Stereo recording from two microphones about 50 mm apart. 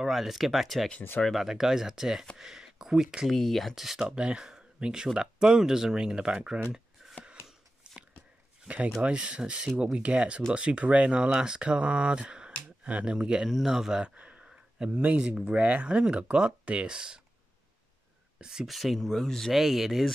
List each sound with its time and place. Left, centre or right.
0.0 s speech: centre
3.3 s speech: centre
3.7 s speech: centre
4.0 s speech: right
7.0 s a sound: centre
8.6 s speech: right
13.5 s speech: centre
14.1 s a sound: right
14.4 s a sound: centre
14.9 s speech: right
15.1 s speech: centre
18.4 s speech: centre
18.7 s speech: centre
19.5 s speech: centre